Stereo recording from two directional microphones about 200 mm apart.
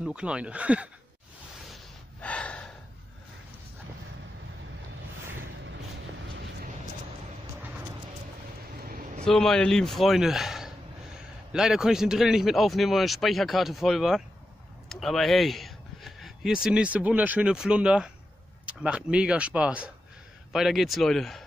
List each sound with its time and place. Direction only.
0.0 s speech: 5° right (ahead or behind)
2.2 s gasp: 5° left (ahead or behind)
8.8 s a sound: 45° right (ahead or behind)
9.2 s a man's voice: 5° left (ahead or behind)